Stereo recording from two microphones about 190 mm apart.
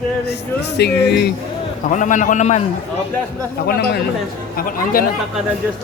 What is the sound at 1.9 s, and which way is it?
Speech, 40° left (ahead or behind).